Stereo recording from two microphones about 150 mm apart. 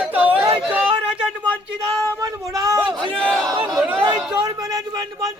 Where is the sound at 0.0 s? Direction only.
10° right (ahead or behind).